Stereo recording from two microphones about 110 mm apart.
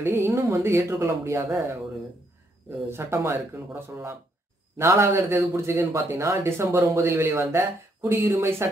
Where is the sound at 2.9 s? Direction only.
20° right (ahead or behind).